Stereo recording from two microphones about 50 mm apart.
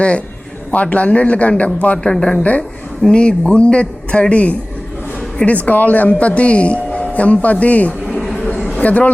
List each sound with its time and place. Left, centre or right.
0.7 s speech: left
2.0 s speech: centre
2.4 s speech: left